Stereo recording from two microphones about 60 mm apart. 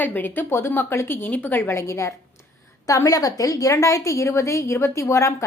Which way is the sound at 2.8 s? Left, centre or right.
Left.